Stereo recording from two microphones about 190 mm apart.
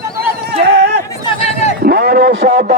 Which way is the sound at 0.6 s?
60° right (ahead or behind).